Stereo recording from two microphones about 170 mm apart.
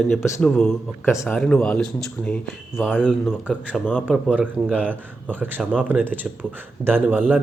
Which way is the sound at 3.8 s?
10° left (ahead or behind).